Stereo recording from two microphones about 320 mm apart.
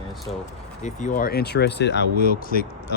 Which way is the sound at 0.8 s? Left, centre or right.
Left.